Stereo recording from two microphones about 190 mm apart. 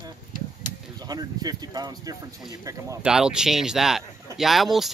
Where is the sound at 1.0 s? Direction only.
20° right (ahead or behind).